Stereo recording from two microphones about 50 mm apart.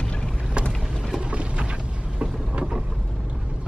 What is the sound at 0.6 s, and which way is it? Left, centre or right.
Boat, right.